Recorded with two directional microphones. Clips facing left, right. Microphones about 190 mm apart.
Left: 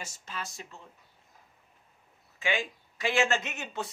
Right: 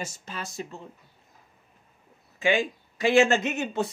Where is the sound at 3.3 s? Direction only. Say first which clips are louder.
Right 7 dB; 35° right (ahead or behind).